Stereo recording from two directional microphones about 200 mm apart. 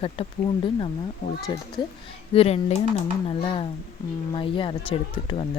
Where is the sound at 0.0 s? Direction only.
25° left (ahead or behind).